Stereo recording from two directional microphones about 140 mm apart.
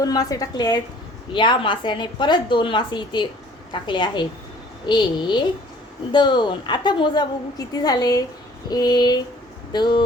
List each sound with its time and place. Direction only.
0.0 s a woman's voice: 25° left (ahead or behind)